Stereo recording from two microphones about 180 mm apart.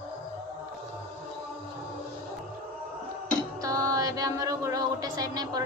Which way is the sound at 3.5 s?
20° right (ahead or behind).